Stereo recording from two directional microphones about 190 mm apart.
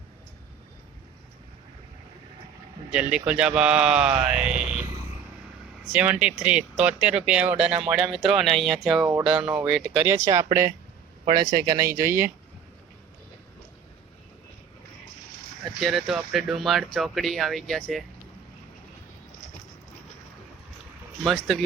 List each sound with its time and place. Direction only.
2.9 s speech: 5° right (ahead or behind)
5.8 s speech: 5° right (ahead or behind)
15.8 s speech: centre (ahead or behind)
21.2 s speech: centre (ahead or behind)